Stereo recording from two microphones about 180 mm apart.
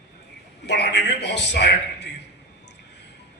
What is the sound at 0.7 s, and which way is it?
A man's voice, 70° left (ahead or behind).